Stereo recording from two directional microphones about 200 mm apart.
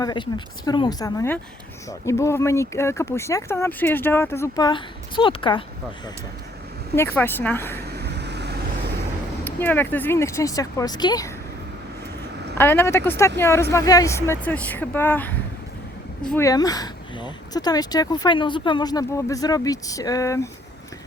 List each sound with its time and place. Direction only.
0.0 s speech: 20° left (ahead or behind)
6.9 s speech: 10° left (ahead or behind)
7.8 s vehicle: 55° right (ahead or behind)
9.4 s speech: 10° left (ahead or behind)
12.5 s speech: 10° left (ahead or behind)
16.5 s speech: 20° left (ahead or behind)